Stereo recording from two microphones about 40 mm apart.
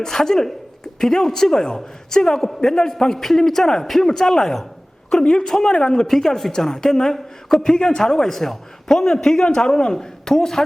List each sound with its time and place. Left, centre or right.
0.0 s a woman's voice: centre